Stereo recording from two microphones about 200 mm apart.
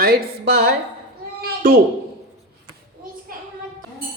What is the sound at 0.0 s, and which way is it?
Speech, 50° right (ahead or behind).